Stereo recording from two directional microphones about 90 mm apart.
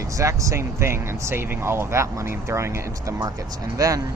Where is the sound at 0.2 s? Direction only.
35° right (ahead or behind).